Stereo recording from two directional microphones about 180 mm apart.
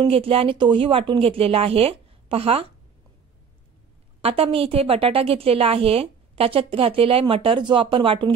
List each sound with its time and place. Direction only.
0.0 s a woman's voice: 30° right (ahead or behind)
4.2 s a woman's voice: 35° right (ahead or behind)